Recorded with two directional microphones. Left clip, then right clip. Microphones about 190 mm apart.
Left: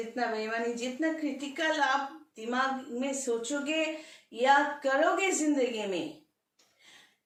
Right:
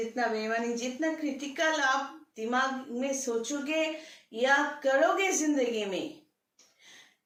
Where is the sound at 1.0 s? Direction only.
20° right (ahead or behind).